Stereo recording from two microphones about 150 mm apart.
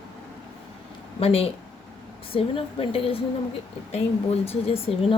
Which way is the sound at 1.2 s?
40° left (ahead or behind).